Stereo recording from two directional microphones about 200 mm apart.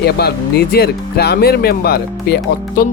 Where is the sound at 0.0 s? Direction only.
55° left (ahead or behind).